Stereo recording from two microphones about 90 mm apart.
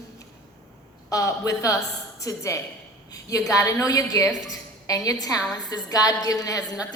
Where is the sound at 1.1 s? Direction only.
40° left (ahead or behind).